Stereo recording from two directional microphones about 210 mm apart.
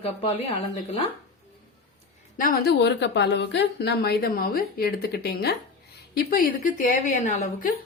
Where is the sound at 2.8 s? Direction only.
55° left (ahead or behind).